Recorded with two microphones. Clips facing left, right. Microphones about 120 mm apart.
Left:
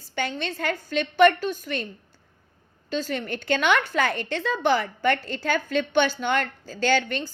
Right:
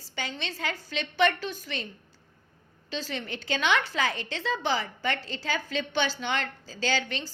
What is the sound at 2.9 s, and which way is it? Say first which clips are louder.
A woman's voice: left 6 dB; 50° left (ahead or behind).